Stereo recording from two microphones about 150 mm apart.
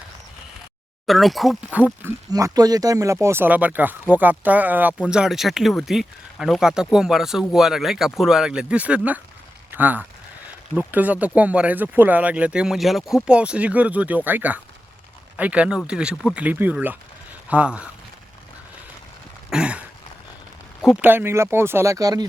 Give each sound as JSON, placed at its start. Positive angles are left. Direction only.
{"t": 1.0, "sound": "speech", "side_deg": 0}
{"t": 2.3, "sound": "speech", "side_deg": -25}
{"t": 19.5, "sound": "a sound", "side_deg": -5}
{"t": 21.0, "sound": "speech", "side_deg": -15}